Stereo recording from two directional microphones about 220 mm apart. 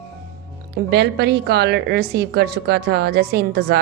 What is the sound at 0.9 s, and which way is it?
A woman's voice, 50° right (ahead or behind).